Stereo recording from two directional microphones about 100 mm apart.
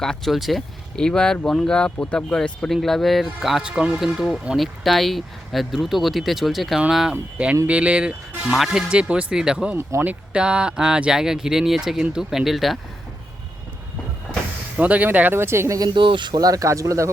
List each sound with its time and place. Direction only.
0.0 s speech: centre (ahead or behind)
9.7 s speech: 20° right (ahead or behind); by 12.8 s centre (ahead or behind)
14.8 s speech: 15° right (ahead or behind)
16.0 s speech: 55° right (ahead or behind); by 17.1 s 30° right (ahead or behind)